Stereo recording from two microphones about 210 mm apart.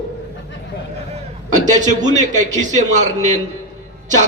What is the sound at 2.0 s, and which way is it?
Speech, 20° right (ahead or behind).